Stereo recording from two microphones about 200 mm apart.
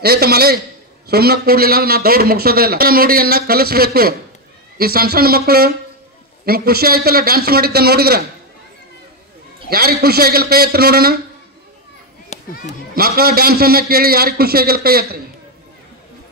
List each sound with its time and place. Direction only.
0.0 s a man's voice: 50° right (ahead or behind)
9.7 s a man's voice: 50° right (ahead or behind)
12.3 s children playing: 35° left (ahead or behind)
12.9 s a man's voice: 50° right (ahead or behind)